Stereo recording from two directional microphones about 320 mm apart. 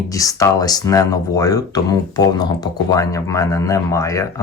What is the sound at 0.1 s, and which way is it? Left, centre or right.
Speech, centre.